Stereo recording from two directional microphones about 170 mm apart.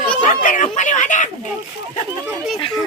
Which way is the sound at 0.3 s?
50° left (ahead or behind).